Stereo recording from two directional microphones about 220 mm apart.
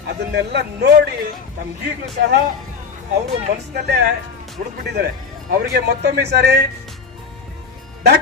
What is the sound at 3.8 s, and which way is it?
Speech, 50° right (ahead or behind).